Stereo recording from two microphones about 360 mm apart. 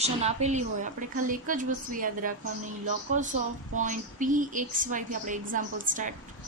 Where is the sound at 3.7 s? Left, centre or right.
Right.